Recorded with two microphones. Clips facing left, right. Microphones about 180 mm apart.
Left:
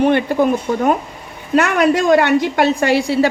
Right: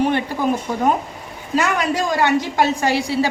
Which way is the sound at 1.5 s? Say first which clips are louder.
Left 6 dB; 65° left (ahead or behind).